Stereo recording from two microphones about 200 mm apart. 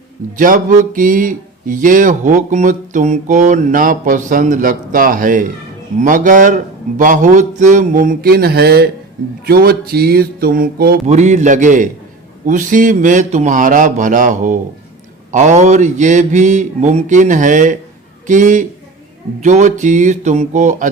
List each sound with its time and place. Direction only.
0.3 s speech: 40° right (ahead or behind)
9.5 s mantra: 50° right (ahead or behind)
11.0 s speech: 35° right (ahead or behind)